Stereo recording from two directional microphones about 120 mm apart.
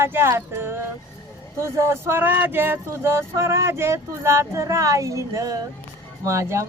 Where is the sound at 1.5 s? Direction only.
25° right (ahead or behind).